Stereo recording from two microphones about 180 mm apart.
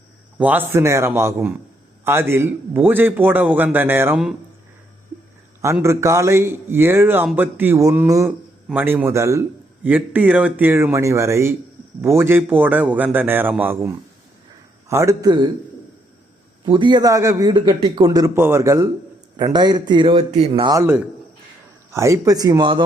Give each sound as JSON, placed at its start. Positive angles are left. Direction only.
{"t": 0.3, "sound": "a man's voice", "side_deg": -10}
{"t": 5.6, "sound": "a man's voice", "side_deg": -15}
{"t": 16.6, "sound": "a man's voice", "side_deg": -25}
{"t": 20.5, "sound": "a man's voice", "side_deg": -25}